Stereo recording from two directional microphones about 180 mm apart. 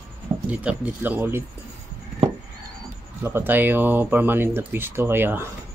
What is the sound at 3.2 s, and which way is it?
Speech, 10° right (ahead or behind).